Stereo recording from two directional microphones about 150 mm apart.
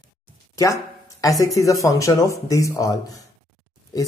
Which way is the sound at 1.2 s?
25° left (ahead or behind).